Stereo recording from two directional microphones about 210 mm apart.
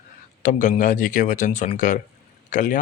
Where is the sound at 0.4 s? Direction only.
35° left (ahead or behind).